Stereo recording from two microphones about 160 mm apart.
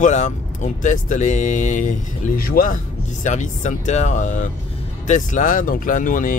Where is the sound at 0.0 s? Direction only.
50° left (ahead or behind); by 2.8 s 65° left (ahead or behind).